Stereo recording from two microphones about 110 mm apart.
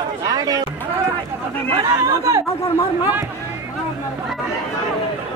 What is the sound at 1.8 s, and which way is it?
Speech, 30° right (ahead or behind).